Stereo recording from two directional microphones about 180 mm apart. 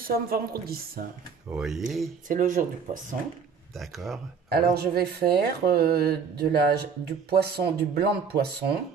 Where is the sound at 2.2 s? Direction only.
50° right (ahead or behind).